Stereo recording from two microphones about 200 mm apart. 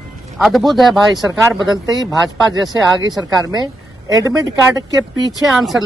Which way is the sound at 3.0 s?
20° right (ahead or behind).